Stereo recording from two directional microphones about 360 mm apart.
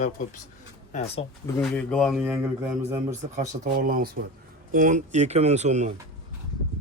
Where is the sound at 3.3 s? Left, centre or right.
Right.